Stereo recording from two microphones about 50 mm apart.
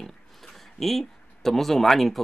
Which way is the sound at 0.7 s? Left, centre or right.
Centre.